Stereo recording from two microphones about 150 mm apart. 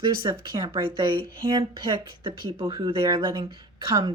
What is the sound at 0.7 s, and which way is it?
A woman's voice, 35° right (ahead or behind).